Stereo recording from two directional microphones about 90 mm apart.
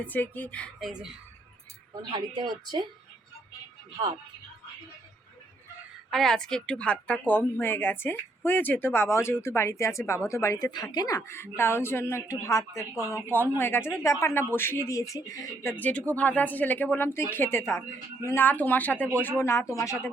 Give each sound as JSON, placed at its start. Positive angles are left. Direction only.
{"t": 0.0, "sound": "a woman's voice", "side_deg": 20}
{"t": 0.8, "sound": "speech", "side_deg": -5}
{"t": 2.0, "sound": "a woman's voice", "side_deg": -55}
{"t": 3.9, "sound": "a woman's voice", "side_deg": -55}
{"t": 6.1, "sound": "a woman's voice", "side_deg": 5}
{"t": 10.6, "sound": "a woman's voice", "side_deg": 50}
{"t": 11.3, "sound": "speech", "side_deg": 30}
{"t": 13.3, "sound": "speech", "side_deg": 25}
{"t": 15.8, "sound": "speech", "side_deg": 15}